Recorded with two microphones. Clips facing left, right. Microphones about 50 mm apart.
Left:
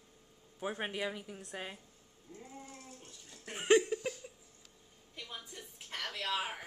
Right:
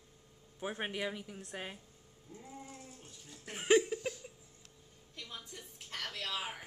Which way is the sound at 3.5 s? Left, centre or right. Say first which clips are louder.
Left 1 dB; centre.